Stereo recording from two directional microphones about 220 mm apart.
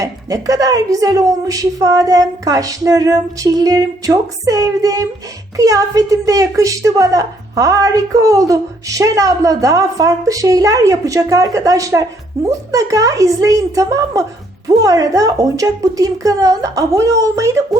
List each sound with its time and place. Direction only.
0.0 s a woman's voice: 15° right (ahead or behind)